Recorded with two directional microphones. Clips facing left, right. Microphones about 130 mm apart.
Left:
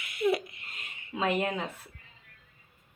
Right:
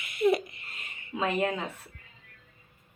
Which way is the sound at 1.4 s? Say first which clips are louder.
Right 2 dB; centre (ahead or behind).